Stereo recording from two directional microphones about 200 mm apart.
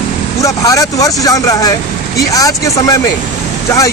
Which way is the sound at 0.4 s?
15° left (ahead or behind).